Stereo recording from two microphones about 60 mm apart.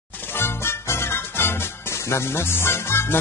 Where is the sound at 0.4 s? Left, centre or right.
Left.